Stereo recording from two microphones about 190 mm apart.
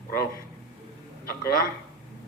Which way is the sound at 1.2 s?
50° left (ahead or behind).